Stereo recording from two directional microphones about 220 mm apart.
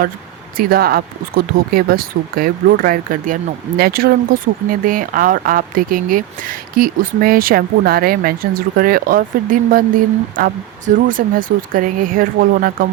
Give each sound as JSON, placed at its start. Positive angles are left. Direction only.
{"t": 0.5, "sound": "speech", "side_deg": -45}